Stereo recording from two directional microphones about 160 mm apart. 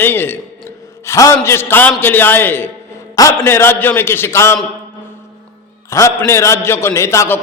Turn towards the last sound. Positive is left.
turn(degrees=15)  # may be behind; listen again after turning